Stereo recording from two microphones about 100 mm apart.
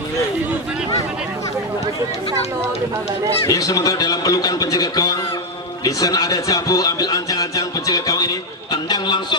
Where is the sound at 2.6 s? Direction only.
30° right (ahead or behind).